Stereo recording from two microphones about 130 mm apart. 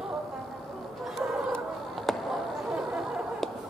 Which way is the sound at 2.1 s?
Centre (ahead or behind).